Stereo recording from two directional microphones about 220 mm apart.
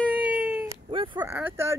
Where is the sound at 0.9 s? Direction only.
25° right (ahead or behind).